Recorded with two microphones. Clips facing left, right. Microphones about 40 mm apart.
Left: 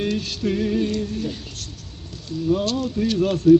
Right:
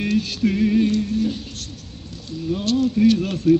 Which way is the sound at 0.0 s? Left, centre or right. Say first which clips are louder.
Right 3 dB; right.